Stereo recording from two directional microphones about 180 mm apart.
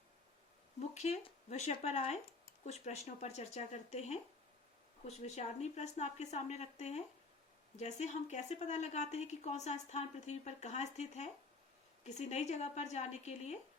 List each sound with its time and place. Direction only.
0.8 s a woman's voice: 40° left (ahead or behind)